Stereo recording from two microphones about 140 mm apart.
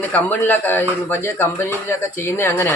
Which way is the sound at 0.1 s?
10° left (ahead or behind).